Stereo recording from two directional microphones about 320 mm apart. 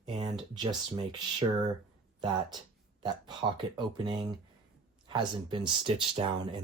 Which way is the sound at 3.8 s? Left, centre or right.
Centre.